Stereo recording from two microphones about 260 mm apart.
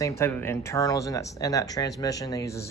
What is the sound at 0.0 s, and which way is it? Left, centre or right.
Speech, centre.